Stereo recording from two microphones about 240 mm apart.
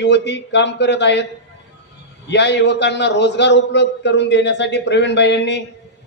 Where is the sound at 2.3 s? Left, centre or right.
Left.